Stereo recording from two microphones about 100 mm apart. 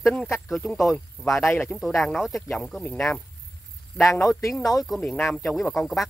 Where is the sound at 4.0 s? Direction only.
30° left (ahead or behind).